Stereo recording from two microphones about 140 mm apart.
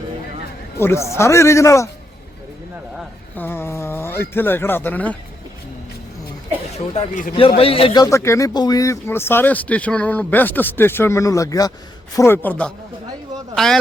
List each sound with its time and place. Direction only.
0.8 s a man's voice: 20° left (ahead or behind)
3.3 s speech: 15° left (ahead or behind)
6.7 s a man's voice: 50° left (ahead or behind)
8.0 s speech: 20° left (ahead or behind)